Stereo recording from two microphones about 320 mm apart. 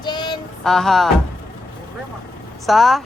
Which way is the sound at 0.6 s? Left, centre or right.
Centre.